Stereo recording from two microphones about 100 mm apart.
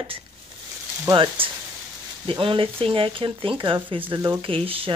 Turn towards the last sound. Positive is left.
turn(degrees=-65)  # may be behind; listen again after turning